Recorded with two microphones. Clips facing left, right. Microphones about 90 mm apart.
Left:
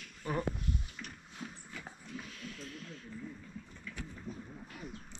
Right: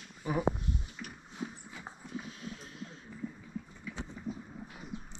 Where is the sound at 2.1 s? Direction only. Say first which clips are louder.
Right 4 dB; 25° right (ahead or behind).